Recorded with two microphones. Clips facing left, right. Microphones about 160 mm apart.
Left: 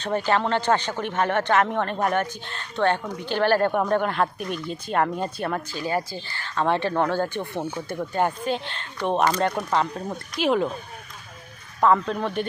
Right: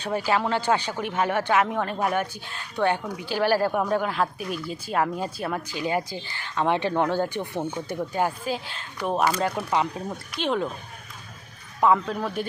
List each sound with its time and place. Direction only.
0.0 s speech: 10° right (ahead or behind)
5.7 s speech: 15° right (ahead or behind)
10.4 s speech: 5° left (ahead or behind)
11.8 s speech: 5° right (ahead or behind)